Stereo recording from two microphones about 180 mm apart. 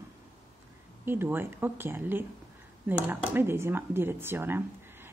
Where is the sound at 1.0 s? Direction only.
10° right (ahead or behind).